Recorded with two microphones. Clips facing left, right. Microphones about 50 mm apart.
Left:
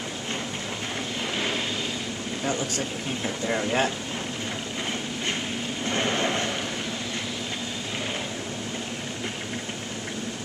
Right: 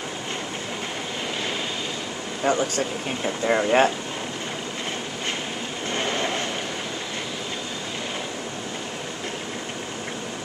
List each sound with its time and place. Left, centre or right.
2.4 s speech: right
3.3 s speech: right
5.9 s vehicle: centre